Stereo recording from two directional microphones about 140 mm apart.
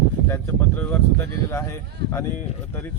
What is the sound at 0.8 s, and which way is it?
Speech, 15° left (ahead or behind).